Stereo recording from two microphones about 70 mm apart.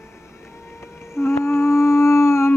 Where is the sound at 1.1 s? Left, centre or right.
Left.